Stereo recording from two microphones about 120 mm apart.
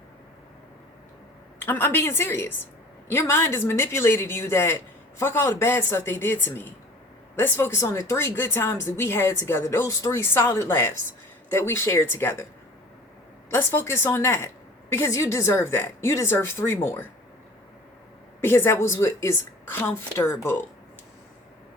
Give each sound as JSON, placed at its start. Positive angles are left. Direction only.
{"t": 1.6, "sound": "speech", "side_deg": 20}
{"t": 13.5, "sound": "speech", "side_deg": 20}
{"t": 18.3, "sound": "speech", "side_deg": 20}